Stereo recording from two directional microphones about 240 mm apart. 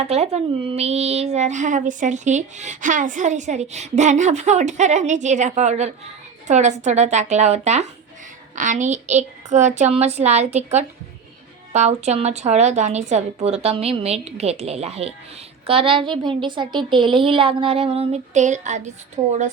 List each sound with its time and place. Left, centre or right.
0.1 s speech: right